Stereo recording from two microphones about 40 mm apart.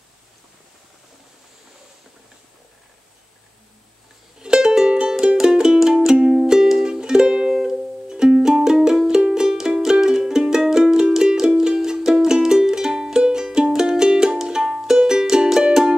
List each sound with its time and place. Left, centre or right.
4.4 s music: right